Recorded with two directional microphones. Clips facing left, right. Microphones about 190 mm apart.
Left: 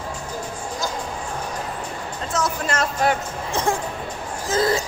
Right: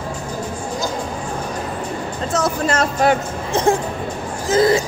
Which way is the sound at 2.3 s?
35° right (ahead or behind).